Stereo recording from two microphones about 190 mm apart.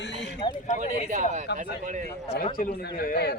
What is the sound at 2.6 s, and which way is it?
Speech, 55° left (ahead or behind).